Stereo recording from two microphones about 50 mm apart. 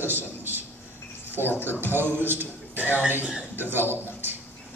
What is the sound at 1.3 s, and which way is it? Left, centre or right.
Speech, left.